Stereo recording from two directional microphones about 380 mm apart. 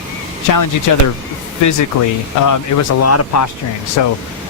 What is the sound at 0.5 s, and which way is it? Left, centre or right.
Speech, left.